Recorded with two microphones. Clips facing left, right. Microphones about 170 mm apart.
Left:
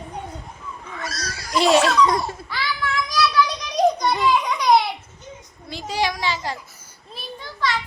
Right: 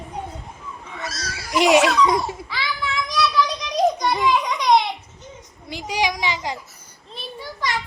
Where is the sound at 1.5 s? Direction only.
15° right (ahead or behind).